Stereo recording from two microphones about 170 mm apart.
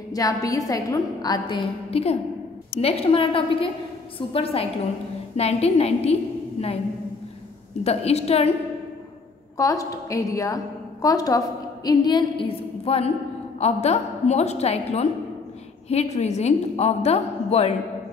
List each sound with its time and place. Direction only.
0.1 s a woman's voice: 20° left (ahead or behind)
1.9 s a woman's voice: 35° left (ahead or behind)
7.8 s a woman's voice: 40° left (ahead or behind)
9.6 s a woman's voice: 20° left (ahead or behind); by 17.7 s 35° left (ahead or behind)